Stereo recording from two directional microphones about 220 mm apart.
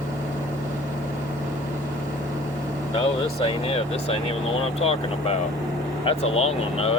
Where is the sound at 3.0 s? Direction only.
25° left (ahead or behind).